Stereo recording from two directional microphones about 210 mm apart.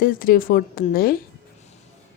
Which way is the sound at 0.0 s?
45° left (ahead or behind).